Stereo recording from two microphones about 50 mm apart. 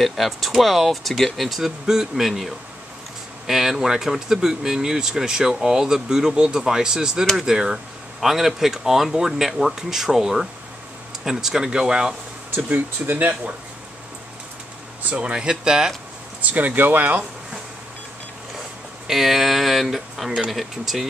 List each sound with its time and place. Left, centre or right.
0.0 s speech: centre
12.5 s speech: right
15.1 s speech: centre
16.4 s speech: right
19.0 s speech: centre